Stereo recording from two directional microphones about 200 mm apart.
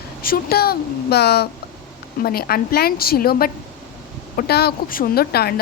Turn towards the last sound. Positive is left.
turn(degrees=50)  # may be behind; listen again after turning